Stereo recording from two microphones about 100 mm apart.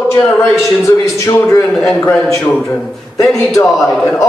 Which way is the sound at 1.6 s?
5° left (ahead or behind).